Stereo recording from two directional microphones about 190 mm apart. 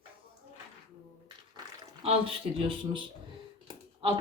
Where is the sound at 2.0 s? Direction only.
30° right (ahead or behind).